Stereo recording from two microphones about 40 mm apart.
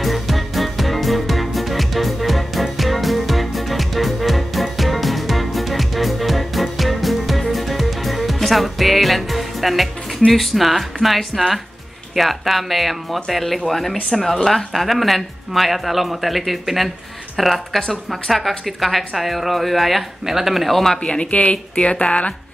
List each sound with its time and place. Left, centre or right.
0.0 s music: centre
12.2 s speech: centre
21.0 s speech: left